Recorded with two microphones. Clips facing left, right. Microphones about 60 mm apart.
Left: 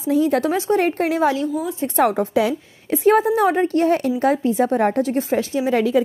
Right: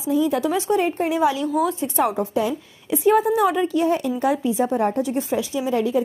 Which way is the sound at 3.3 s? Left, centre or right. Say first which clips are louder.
Left 2 dB; left.